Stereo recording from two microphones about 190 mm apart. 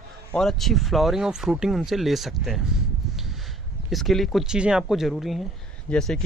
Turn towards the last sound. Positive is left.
turn(degrees=0)  # may be behind; listen again after turning